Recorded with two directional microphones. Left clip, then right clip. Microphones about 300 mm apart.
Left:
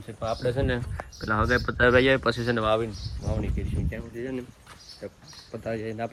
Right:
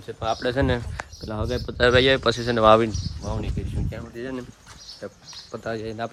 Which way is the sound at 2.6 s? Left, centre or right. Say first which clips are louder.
Right 11 dB; right.